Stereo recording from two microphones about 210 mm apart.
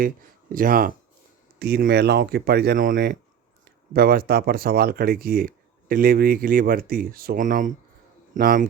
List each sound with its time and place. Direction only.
0.5 s speech: 40° right (ahead or behind)